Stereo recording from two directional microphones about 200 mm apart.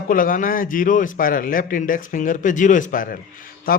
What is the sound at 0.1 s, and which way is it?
Speech, 45° left (ahead or behind).